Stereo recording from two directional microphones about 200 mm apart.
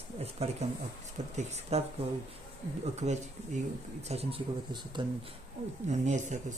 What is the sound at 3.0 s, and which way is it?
Speech, 35° right (ahead or behind).